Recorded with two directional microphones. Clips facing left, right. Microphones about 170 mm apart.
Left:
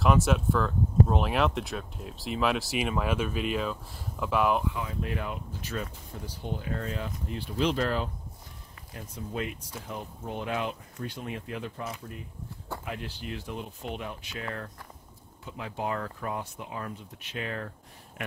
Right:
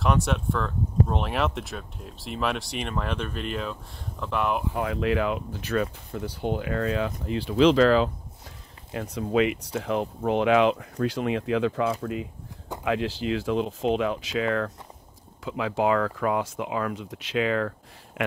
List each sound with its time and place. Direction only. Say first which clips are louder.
0.0 s speech: left 1 dB; centre (ahead or behind)
4.7 s speech: right 9 dB; 80° right
8.9 s speech: right 11 dB; 75° right (ahead or behind)